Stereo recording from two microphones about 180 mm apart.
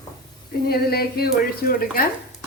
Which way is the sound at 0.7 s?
60° left (ahead or behind).